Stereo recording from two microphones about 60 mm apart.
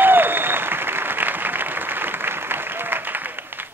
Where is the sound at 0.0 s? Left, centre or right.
Right.